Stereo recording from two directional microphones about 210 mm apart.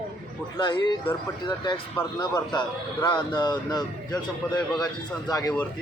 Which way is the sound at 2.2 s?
20° left (ahead or behind).